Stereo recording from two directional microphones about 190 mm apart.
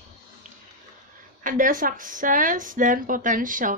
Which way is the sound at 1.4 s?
45° right (ahead or behind).